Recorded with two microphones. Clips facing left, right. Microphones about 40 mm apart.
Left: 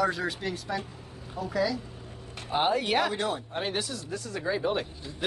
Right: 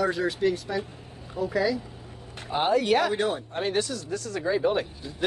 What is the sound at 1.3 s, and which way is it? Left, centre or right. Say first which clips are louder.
Speech: right 3 dB; centre.